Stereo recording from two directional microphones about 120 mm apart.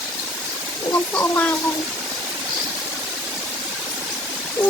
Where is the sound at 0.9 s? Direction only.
15° left (ahead or behind).